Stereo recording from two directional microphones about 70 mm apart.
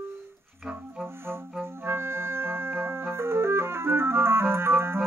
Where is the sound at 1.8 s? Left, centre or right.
Right.